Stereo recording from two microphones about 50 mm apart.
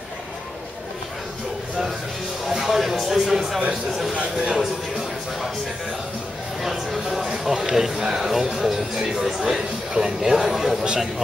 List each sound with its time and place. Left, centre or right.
2.4 s speech: centre
4.1 s speech: right
6.6 s speech: centre